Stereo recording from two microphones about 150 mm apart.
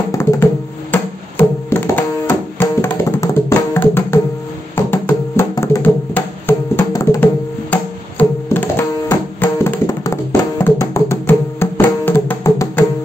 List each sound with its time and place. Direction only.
0.1 s music: 20° left (ahead or behind)
1.7 s music: 15° left (ahead or behind)
7.7 s tabla: 10° left (ahead or behind)
9.4 s music: 15° left (ahead or behind)